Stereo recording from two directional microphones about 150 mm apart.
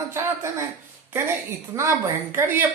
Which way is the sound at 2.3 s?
15° right (ahead or behind).